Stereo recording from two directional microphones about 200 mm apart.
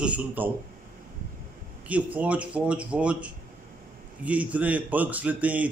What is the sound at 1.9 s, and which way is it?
A man's voice, 5° right (ahead or behind).